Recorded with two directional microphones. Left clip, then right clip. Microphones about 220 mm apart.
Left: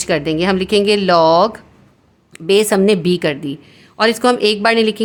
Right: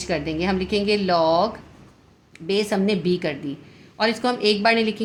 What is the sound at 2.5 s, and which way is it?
A woman's voice, 45° left (ahead or behind).